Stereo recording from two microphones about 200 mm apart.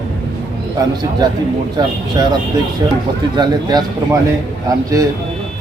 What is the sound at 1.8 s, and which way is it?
A man's voice, 20° right (ahead or behind).